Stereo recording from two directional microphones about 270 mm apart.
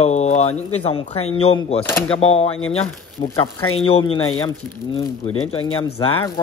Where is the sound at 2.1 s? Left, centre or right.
Left.